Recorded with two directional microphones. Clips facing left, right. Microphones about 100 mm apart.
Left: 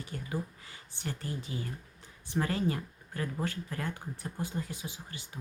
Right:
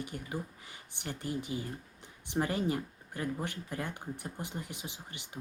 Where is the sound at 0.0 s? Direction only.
15° right (ahead or behind).